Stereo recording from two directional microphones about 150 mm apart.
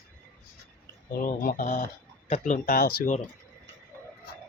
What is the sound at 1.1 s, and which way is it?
Speech, 65° left (ahead or behind).